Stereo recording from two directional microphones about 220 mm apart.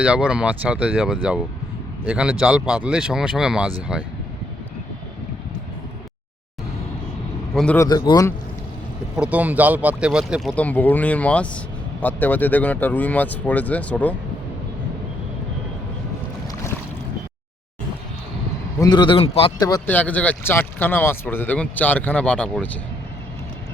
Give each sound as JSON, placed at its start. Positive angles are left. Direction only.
{"t": 0.0, "sound": "speech", "side_deg": -5}
{"t": 7.5, "sound": "speech", "side_deg": 5}
{"t": 7.9, "sound": "speech", "side_deg": 20}
{"t": 9.1, "sound": "speech", "side_deg": -5}
{"t": 10.5, "sound": "speech", "side_deg": 5}
{"t": 18.8, "sound": "speech", "side_deg": 20}